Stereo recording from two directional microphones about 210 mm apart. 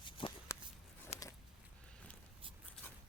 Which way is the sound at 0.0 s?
25° left (ahead or behind).